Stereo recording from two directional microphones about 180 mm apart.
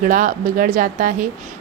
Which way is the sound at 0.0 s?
50° right (ahead or behind).